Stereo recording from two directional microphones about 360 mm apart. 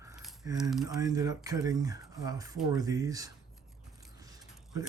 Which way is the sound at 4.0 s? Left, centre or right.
Centre.